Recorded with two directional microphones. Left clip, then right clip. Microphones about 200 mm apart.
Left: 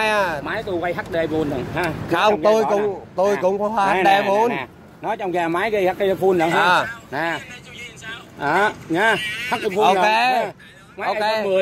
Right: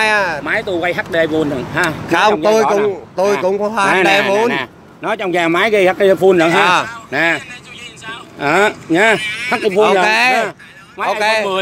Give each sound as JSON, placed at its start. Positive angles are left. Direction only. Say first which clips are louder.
{"t": 0.0, "sound": "speech", "louder": "right 5 dB", "side_deg": 0}
{"t": 0.5, "sound": "speech", "louder": "right 7 dB", "side_deg": -45}
{"t": 2.0, "sound": "speech", "louder": "right 3 dB", "side_deg": -5}
{"t": 4.5, "sound": "speech", "louder": "right 6 dB", "side_deg": -40}
{"t": 6.5, "sound": "speech", "louder": "right 4 dB", "side_deg": -5}
{"t": 7.1, "sound": "speech", "louder": "right 9 dB", "side_deg": -40}
{"t": 7.8, "sound": "vehicle", "louder": "right 4 dB", "side_deg": 0}
{"t": 8.4, "sound": "speech", "louder": "right 5 dB", "side_deg": -35}
{"t": 9.2, "sound": "speech", "louder": "right 6 dB", "side_deg": 0}